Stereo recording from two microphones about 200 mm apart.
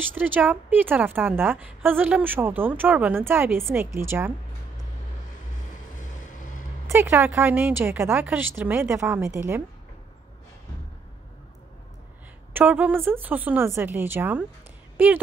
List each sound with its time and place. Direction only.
0.0 s a woman's voice: 10° right (ahead or behind)
6.9 s a woman's voice: 10° right (ahead or behind)
12.5 s a woman's voice: 10° right (ahead or behind)